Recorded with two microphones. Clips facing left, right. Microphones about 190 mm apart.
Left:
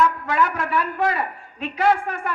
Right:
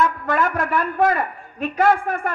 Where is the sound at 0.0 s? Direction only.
50° right (ahead or behind).